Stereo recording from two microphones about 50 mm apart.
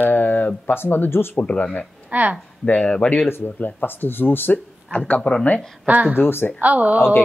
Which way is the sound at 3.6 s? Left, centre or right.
Left.